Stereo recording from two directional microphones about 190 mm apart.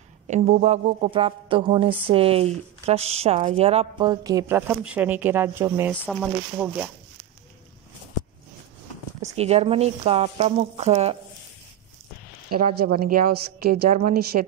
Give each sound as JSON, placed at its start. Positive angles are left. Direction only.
{"t": 0.3, "sound": "speech", "side_deg": -40}
{"t": 9.2, "sound": "speech", "side_deg": -35}
{"t": 12.4, "sound": "a woman's voice", "side_deg": -50}